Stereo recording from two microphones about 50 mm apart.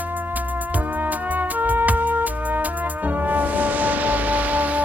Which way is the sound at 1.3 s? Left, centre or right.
Right.